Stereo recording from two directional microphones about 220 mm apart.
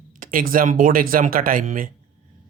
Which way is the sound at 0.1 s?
40° right (ahead or behind).